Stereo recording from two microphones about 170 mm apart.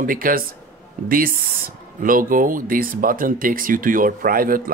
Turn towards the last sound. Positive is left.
turn(degrees=-55)  # may be behind; listen again after turning